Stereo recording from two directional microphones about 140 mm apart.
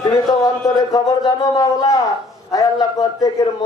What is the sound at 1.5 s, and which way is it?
Speech, 25° left (ahead or behind).